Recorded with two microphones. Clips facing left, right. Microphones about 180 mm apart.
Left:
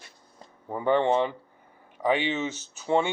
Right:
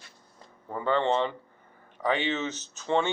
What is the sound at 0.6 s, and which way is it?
Speech, 15° left (ahead or behind).